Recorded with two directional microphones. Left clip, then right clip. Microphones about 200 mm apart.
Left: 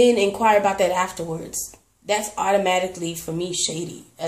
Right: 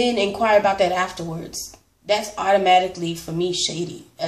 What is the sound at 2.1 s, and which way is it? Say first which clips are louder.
Speech: right 2 dB; 40° left (ahead or behind).